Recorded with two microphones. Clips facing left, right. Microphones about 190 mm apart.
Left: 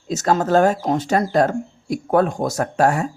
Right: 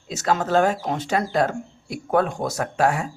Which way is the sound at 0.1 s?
40° left (ahead or behind).